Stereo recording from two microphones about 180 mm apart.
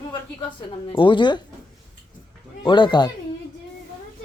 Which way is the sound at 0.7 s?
25° left (ahead or behind).